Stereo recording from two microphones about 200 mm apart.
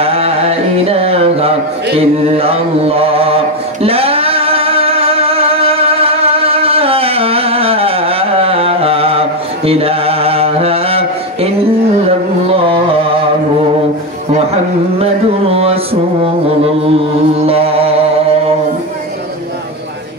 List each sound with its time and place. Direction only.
0.0 s music: 30° right (ahead or behind)
2.0 s mantra: 30° right (ahead or behind)
12.4 s carnatic music: 25° right (ahead or behind)
15.5 s music: 30° right (ahead or behind)
17.4 s mantra: 30° right (ahead or behind)